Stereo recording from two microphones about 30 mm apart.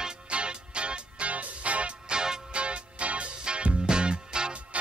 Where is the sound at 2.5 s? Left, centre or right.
Right.